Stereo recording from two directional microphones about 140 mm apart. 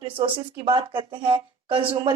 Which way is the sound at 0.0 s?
35° right (ahead or behind).